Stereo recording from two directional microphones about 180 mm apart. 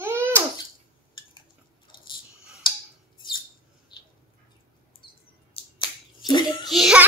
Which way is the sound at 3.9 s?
25° left (ahead or behind).